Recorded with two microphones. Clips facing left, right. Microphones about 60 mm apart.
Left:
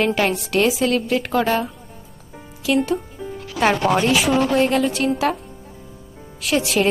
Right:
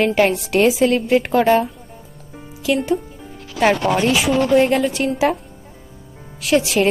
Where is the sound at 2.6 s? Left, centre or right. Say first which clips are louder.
Right 1 dB; centre.